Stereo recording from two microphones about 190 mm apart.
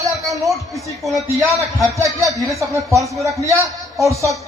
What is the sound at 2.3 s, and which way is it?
A man's voice, 15° right (ahead or behind).